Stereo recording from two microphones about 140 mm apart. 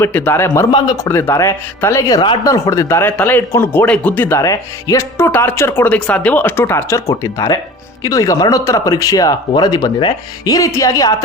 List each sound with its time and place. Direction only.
0.0 s a man's voice: 15° left (ahead or behind)
0.7 s speech: 30° left (ahead or behind)
1.0 s a man's voice: 20° left (ahead or behind)